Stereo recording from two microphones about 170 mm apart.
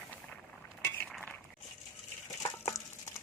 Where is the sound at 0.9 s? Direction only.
5° left (ahead or behind).